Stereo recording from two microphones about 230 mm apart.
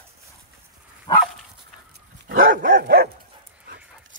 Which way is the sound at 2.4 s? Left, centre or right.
Right.